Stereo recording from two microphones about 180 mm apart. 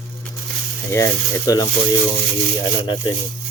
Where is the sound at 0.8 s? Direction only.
15° left (ahead or behind).